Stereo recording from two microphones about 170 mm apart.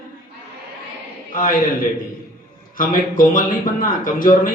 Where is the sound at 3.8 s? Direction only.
55° left (ahead or behind).